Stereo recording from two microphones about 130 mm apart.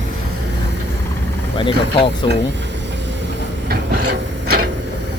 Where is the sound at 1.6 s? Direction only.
40° left (ahead or behind).